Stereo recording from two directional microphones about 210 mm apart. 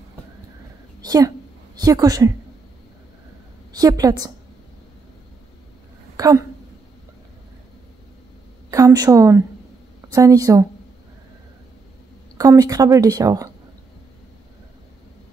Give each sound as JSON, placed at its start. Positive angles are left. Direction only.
{"t": 1.0, "sound": "a woman's voice", "side_deg": -15}
{"t": 3.7, "sound": "speech", "side_deg": -15}
{"t": 6.1, "sound": "speech", "side_deg": -15}
{"t": 8.6, "sound": "a woman's voice", "side_deg": -15}
{"t": 12.4, "sound": "speech", "side_deg": -15}